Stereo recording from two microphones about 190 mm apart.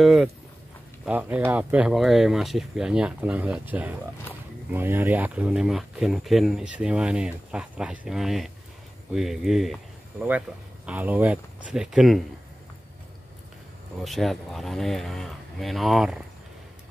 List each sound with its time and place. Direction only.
0.0 s speech: centre (ahead or behind)
10.9 s speech: 10° right (ahead or behind)
14.0 s speech: centre (ahead or behind)